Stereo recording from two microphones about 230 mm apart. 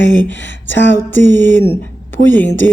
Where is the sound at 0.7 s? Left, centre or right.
Left.